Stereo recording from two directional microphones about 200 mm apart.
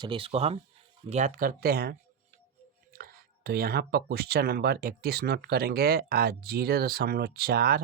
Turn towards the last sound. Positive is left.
turn(degrees=-50)  # may be behind; listen again after turning